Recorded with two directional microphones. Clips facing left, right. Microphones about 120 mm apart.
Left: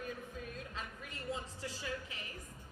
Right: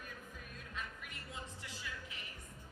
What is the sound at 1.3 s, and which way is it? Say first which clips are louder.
Speech: left 8 dB; 35° left (ahead or behind).